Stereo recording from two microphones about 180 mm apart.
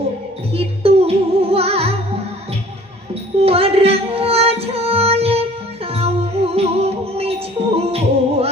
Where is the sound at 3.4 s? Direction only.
35° right (ahead or behind).